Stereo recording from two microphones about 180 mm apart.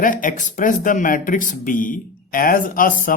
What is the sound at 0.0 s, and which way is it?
Speech, 50° left (ahead or behind).